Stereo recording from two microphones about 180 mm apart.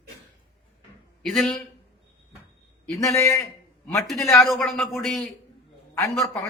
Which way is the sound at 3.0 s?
15° left (ahead or behind).